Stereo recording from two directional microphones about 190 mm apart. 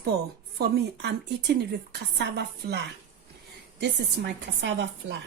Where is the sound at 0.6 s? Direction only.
60° right (ahead or behind).